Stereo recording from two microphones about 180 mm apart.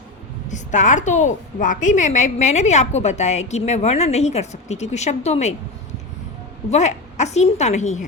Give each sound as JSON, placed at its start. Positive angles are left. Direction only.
{"t": 0.4, "sound": "a woman's voice", "side_deg": 45}
{"t": 6.7, "sound": "a woman's voice", "side_deg": 40}